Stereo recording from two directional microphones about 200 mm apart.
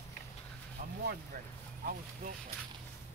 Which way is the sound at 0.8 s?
40° right (ahead or behind).